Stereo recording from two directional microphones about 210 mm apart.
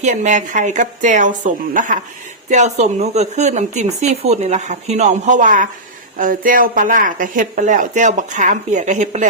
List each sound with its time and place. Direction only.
0.0 s speech: 35° right (ahead or behind)